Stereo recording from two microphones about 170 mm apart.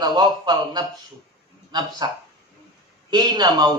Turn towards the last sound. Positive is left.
turn(degrees=-25)  # may be behind; listen again after turning